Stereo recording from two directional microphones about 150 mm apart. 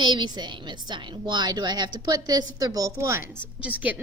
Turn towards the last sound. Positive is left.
turn(degrees=-10)  # may be behind; listen again after turning